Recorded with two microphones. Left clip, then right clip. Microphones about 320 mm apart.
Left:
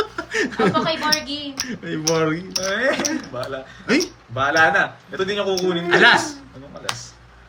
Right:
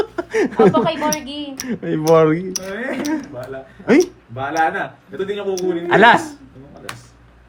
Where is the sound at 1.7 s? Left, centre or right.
Centre.